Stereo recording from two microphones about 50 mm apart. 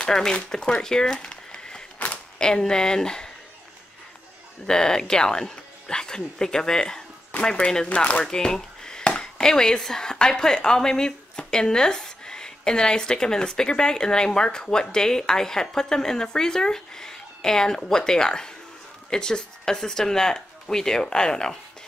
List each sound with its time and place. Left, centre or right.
0.0 s speech: centre
2.0 s a sound: left
2.3 s a woman's voice: centre
4.6 s a woman's voice: centre
9.0 s chop: left
9.4 s a woman's voice: centre